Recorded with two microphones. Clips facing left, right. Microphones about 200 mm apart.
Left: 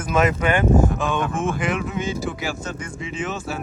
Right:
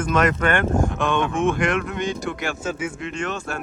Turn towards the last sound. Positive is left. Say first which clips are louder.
# even
turn(degrees=5)  # may be behind; listen again after turning